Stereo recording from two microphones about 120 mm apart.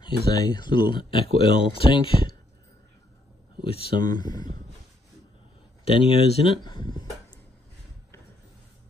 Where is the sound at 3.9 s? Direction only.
35° left (ahead or behind).